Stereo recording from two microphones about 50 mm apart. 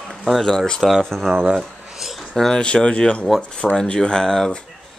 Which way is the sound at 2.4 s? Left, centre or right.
Centre.